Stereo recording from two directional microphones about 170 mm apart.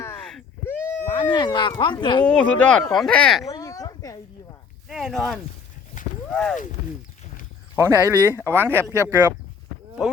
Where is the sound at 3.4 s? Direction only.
20° left (ahead or behind).